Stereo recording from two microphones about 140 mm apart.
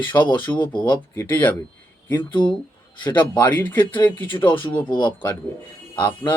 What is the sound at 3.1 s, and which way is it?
Speech, 15° left (ahead or behind).